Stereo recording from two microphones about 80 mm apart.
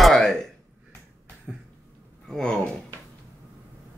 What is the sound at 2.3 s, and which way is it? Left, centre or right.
Speech, centre.